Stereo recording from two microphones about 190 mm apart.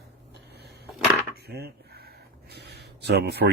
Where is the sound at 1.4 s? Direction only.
55° right (ahead or behind).